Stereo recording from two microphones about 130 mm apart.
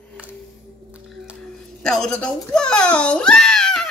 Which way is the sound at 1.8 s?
5° left (ahead or behind).